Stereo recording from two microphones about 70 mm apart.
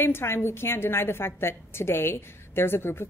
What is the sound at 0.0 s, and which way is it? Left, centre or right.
A woman's voice, left.